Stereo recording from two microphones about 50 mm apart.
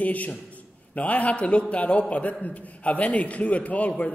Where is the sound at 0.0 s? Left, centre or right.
Left.